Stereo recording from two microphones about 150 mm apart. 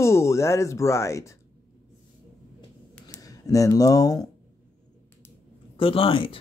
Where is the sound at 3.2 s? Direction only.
25° left (ahead or behind).